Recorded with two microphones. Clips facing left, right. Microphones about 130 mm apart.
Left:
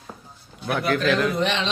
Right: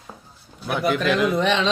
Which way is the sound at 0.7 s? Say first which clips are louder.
Right 1 dB; 15° right (ahead or behind).